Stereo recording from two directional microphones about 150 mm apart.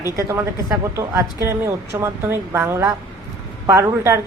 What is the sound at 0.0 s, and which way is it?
A woman's voice, 20° right (ahead or behind).